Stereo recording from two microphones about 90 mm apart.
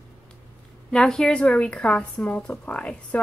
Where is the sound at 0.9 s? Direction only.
5° left (ahead or behind).